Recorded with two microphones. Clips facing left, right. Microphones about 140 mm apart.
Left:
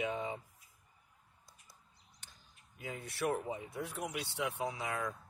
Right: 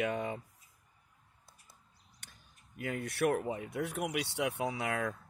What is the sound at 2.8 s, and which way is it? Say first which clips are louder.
Speech: right 6 dB; 65° right (ahead or behind).